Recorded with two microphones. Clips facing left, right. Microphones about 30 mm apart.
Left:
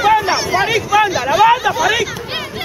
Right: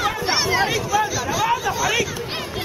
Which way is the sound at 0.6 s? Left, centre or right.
Left.